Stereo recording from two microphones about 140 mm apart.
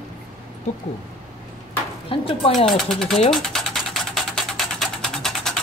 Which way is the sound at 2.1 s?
40° left (ahead or behind).